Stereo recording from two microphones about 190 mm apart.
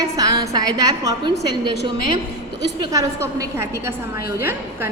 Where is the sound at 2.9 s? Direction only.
20° right (ahead or behind).